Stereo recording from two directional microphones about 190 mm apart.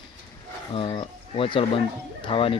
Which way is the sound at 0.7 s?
30° left (ahead or behind).